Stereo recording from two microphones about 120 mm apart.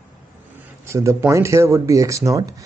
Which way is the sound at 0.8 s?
25° right (ahead or behind).